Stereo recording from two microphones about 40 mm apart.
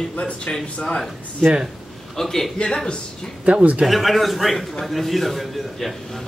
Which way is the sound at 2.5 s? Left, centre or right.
Left.